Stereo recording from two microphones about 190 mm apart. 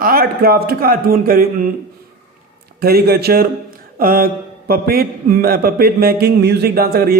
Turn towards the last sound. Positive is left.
turn(degrees=-50)  # may be behind; listen again after turning